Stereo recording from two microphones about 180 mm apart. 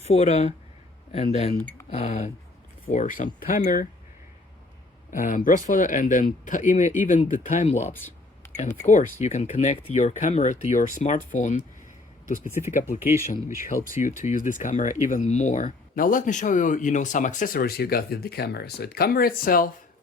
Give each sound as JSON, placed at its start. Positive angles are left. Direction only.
{"t": 0.0, "sound": "a woman's voice", "side_deg": 35}
{"t": 1.5, "sound": "speech", "side_deg": 10}
{"t": 1.9, "sound": "a woman's voice", "side_deg": 35}
{"t": 5.1, "sound": "speech", "side_deg": 50}
{"t": 13.9, "sound": "speech", "side_deg": 45}